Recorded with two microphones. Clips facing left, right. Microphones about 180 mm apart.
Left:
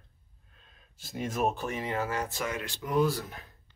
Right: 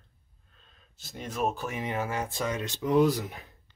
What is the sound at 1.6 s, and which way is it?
Speech, 15° right (ahead or behind).